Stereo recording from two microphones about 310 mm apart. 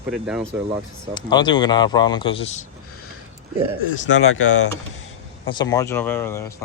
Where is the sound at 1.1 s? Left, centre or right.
Centre.